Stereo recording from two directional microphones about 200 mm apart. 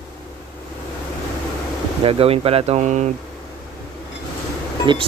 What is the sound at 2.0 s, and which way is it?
Speech, 30° right (ahead or behind).